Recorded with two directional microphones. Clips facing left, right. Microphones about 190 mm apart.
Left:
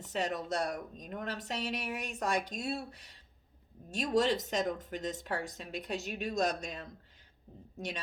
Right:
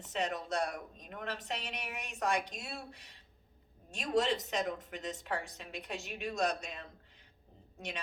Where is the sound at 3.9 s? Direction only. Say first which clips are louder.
Left 2 dB; 40° left (ahead or behind).